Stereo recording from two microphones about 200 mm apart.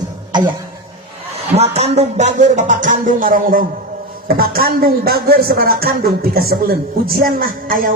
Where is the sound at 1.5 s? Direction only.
30° right (ahead or behind).